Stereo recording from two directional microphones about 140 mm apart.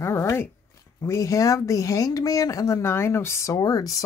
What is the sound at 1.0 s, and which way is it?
Speech, 20° left (ahead or behind).